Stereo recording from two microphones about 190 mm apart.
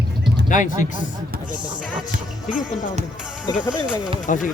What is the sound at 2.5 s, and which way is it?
Speech, 45° left (ahead or behind).